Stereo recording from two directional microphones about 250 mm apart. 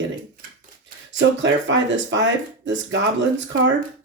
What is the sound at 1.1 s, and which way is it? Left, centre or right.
Speech, right.